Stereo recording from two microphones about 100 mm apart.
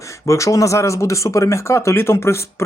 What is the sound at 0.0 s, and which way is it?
Speech, 30° left (ahead or behind).